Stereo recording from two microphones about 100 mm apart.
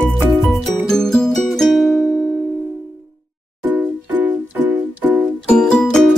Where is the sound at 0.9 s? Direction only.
5° left (ahead or behind).